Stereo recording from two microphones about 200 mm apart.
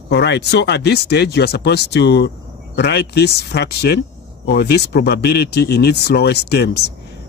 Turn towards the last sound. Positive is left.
turn(degrees=55)  # may be behind; listen again after turning